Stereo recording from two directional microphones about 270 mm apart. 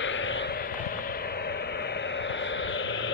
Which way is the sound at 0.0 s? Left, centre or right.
Left.